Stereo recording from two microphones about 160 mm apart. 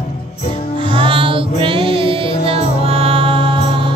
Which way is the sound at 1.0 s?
35° right (ahead or behind).